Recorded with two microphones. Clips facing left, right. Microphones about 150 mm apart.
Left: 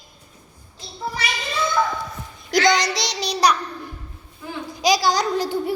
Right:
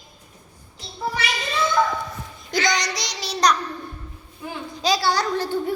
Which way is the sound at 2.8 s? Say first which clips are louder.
Left 5 dB; 20° left (ahead or behind).